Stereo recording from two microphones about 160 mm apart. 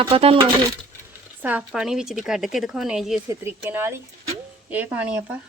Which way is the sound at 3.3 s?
15° right (ahead or behind).